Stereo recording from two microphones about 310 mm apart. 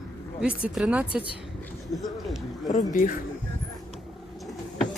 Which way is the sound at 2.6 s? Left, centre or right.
Left.